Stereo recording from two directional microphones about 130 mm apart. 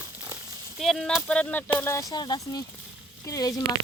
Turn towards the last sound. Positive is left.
turn(degrees=30)  # may be behind; listen again after turning